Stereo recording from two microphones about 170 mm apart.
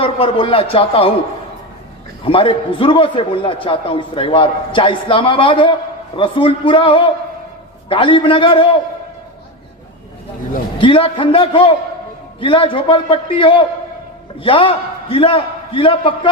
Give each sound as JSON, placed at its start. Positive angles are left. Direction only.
{"t": 0.0, "sound": "a man's voice", "side_deg": 35}
{"t": 2.2, "sound": "a man's voice", "side_deg": 30}
{"t": 10.8, "sound": "a man's voice", "side_deg": 30}